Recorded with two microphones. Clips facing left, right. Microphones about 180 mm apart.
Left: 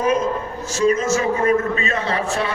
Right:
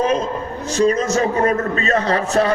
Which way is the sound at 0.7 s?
35° right (ahead or behind).